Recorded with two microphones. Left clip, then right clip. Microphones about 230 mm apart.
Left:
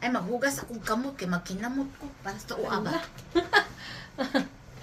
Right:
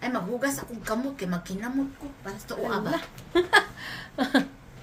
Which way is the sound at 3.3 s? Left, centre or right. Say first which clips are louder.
Right 3 dB; right.